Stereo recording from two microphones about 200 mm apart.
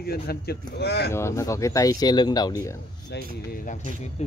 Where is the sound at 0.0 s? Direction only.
50° left (ahead or behind).